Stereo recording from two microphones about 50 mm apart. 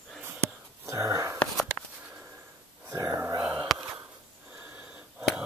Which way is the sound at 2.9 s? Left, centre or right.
Right.